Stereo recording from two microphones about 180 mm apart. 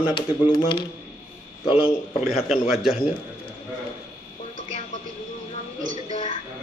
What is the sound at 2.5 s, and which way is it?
Speech, 5° right (ahead or behind).